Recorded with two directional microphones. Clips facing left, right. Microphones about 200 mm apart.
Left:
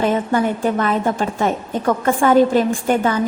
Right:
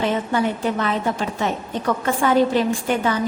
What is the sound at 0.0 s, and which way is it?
A woman's voice, 50° left (ahead or behind).